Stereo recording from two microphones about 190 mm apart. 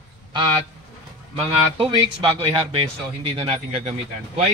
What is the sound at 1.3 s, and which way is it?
Speech, 30° right (ahead or behind).